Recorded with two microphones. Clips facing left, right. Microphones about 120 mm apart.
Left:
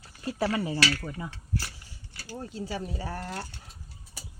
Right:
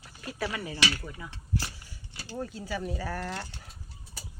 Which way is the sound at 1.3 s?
20° right (ahead or behind).